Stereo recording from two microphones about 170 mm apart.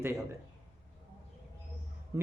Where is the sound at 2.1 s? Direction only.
20° right (ahead or behind).